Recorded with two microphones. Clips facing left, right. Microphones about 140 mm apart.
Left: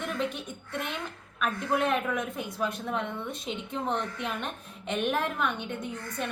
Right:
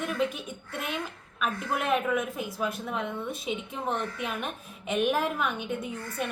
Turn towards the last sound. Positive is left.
turn(degrees=-5)  # may be behind; listen again after turning